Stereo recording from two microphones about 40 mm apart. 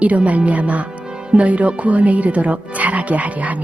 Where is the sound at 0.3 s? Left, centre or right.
Right.